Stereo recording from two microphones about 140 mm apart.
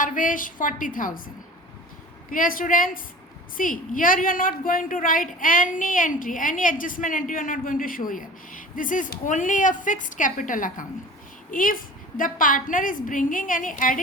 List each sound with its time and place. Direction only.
0.0 s a woman's voice: 70° left (ahead or behind)
2.3 s a woman's voice: 75° left (ahead or behind)